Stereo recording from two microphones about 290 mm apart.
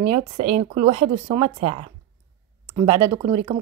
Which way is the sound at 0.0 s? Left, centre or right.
Right.